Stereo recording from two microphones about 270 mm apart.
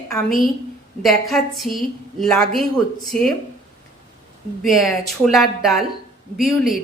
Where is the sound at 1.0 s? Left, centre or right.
Centre.